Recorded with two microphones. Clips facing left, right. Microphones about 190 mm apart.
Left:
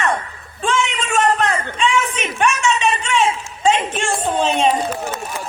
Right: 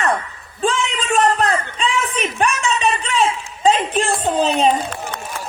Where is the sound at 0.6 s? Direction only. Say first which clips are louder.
Right 1 dB; 35° right (ahead or behind).